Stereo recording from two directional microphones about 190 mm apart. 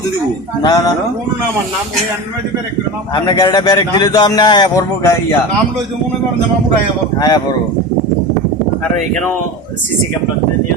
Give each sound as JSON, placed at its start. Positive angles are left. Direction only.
{"t": 0.6, "sound": "a man's voice", "side_deg": 20}
{"t": 3.2, "sound": "a man's voice", "side_deg": 20}
{"t": 7.2, "sound": "a man's voice", "side_deg": 20}